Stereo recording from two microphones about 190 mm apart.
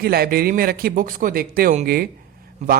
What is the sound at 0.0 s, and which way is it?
Speech, 55° right (ahead or behind).